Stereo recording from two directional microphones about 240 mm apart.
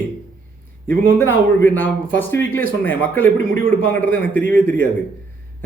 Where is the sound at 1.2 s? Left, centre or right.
Centre.